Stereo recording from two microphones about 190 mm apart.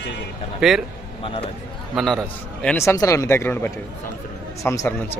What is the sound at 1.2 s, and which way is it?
Speech, 30° left (ahead or behind).